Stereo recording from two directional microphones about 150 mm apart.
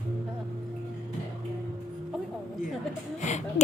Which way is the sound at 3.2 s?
50° left (ahead or behind).